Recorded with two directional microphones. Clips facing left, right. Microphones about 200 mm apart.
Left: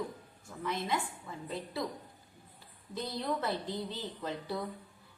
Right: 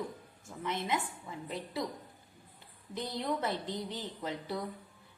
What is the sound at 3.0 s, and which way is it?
A woman's voice, 20° right (ahead or behind).